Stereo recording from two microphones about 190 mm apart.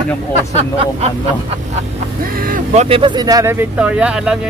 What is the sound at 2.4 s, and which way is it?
Speech, 50° right (ahead or behind).